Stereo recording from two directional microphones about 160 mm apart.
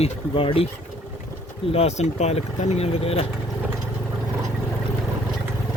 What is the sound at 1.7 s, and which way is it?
Speech, 40° left (ahead or behind).